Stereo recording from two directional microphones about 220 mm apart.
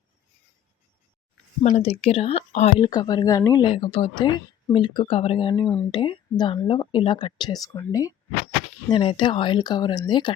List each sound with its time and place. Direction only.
1.7 s speech: 25° left (ahead or behind)